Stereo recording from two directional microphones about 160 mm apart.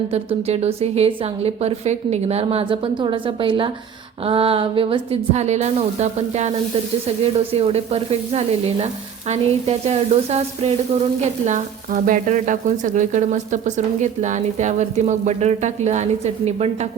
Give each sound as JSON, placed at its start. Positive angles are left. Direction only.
{"t": 0.1, "sound": "a woman's voice", "side_deg": -40}
{"t": 7.7, "sound": "a woman's voice", "side_deg": -40}
{"t": 11.4, "sound": "speech", "side_deg": -55}